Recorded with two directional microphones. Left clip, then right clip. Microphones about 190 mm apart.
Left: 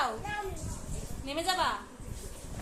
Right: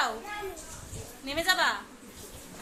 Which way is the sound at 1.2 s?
5° left (ahead or behind).